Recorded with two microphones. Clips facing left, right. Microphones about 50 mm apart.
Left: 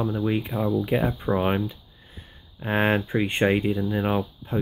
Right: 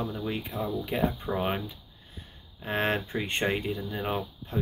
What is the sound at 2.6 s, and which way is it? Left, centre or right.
Speech, centre.